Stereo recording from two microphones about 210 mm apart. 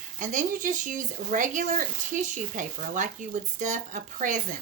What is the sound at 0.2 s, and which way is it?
Speech, 40° right (ahead or behind).